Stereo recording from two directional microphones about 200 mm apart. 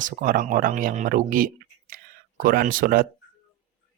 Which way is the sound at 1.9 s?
45° right (ahead or behind).